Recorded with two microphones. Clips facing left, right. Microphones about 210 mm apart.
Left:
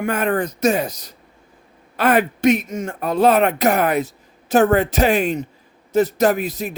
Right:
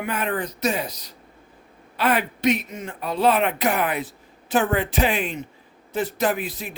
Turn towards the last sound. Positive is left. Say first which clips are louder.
# left 6 dB
turn(degrees=45)  # may be behind; listen again after turning